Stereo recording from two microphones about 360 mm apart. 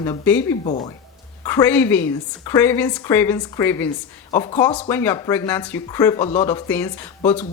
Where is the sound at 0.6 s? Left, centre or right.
Centre.